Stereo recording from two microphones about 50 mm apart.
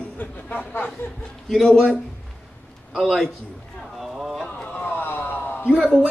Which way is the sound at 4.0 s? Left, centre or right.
Centre.